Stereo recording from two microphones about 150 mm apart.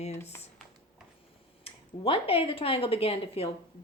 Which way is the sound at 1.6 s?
40° left (ahead or behind).